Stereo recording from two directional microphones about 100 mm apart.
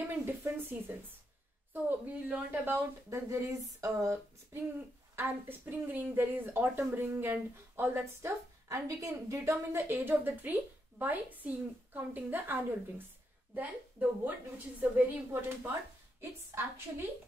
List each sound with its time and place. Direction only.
0.2 s speech: 20° right (ahead or behind)